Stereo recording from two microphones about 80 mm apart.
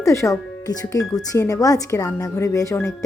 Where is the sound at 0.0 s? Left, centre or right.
Left.